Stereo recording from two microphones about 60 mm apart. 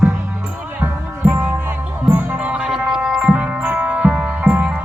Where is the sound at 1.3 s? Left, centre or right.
Right.